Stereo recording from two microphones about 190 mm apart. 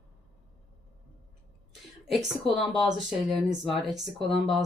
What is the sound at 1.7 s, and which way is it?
Speech, centre (ahead or behind).